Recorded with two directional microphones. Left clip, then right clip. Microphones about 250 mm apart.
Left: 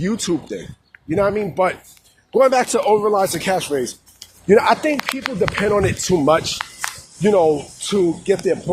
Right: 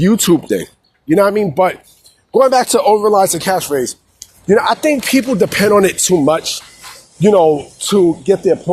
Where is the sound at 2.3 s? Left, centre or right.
Centre.